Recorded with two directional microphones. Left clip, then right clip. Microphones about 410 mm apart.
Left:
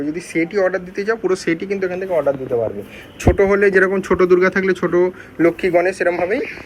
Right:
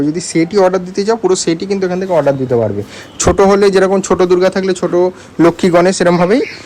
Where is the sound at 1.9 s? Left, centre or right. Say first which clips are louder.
Right 6 dB; right.